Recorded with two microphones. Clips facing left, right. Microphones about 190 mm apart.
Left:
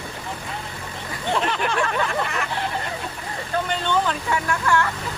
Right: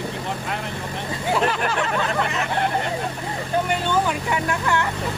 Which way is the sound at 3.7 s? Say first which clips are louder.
Left 1 dB; 10° right (ahead or behind).